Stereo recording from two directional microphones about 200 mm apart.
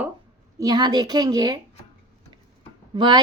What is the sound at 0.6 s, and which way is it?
A woman's voice, 20° right (ahead or behind).